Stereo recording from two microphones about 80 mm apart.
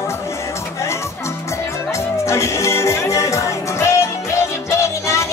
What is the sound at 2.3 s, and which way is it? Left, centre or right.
Music, left.